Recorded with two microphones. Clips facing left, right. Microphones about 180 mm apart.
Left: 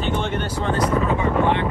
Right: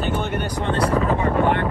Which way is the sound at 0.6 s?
30° right (ahead or behind).